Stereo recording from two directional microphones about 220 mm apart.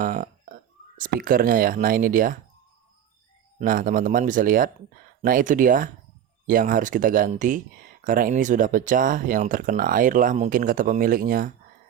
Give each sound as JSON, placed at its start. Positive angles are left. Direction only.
{"t": 0.0, "sound": "burping", "side_deg": -35}
{"t": 0.9, "sound": "speech", "side_deg": -40}
{"t": 3.6, "sound": "speech", "side_deg": -40}